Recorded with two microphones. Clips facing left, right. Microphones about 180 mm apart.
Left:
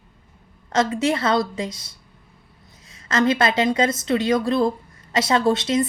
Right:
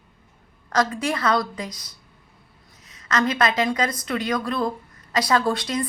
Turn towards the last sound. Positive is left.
turn(degrees=25)  # may be behind; listen again after turning